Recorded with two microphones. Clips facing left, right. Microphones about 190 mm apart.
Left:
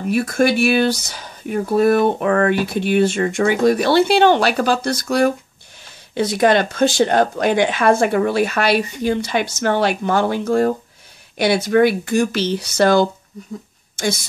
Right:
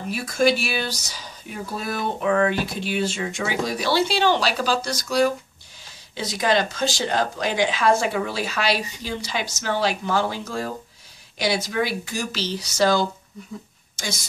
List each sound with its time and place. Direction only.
0.1 s speech: 55° left (ahead or behind)